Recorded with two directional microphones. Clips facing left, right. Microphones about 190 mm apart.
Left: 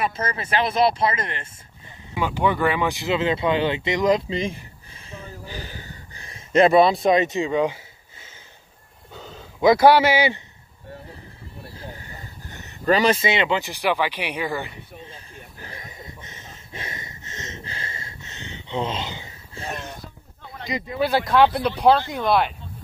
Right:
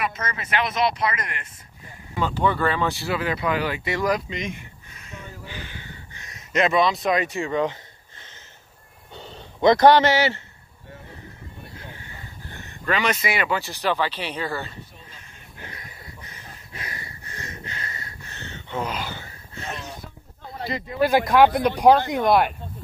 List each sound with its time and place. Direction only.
0.0 s speech: 30° left (ahead or behind)
2.1 s speech: 15° left (ahead or behind)
9.1 s a sound: centre (ahead or behind)
11.7 s speech: 35° left (ahead or behind); by 14.8 s 15° left (ahead or behind)
15.0 s a sound: 30° left (ahead or behind)
21.5 s speech: 15° right (ahead or behind)